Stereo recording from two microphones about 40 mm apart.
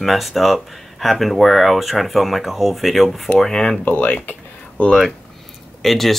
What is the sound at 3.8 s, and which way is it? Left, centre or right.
Speech, left.